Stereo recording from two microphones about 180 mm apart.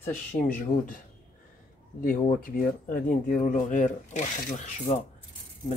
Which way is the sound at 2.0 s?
50° left (ahead or behind).